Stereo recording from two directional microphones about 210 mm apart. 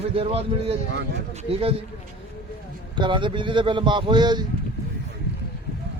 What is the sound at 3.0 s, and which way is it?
Speech, 25° right (ahead or behind).